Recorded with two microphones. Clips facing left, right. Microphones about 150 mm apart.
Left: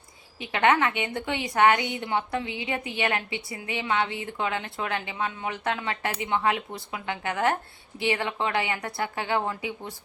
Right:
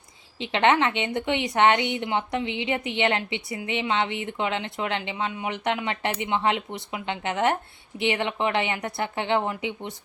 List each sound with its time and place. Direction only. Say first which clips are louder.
0.3 s a woman's voice: right 2 dB; 25° right (ahead or behind)